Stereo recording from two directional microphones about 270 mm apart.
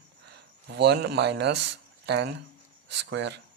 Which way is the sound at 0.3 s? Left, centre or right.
Right.